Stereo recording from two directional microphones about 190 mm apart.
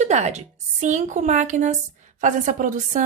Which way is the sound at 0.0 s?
35° right (ahead or behind).